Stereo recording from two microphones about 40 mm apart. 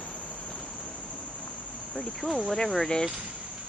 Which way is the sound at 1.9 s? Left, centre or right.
Centre.